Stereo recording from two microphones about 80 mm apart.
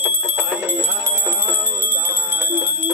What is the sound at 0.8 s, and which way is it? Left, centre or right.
Music, right.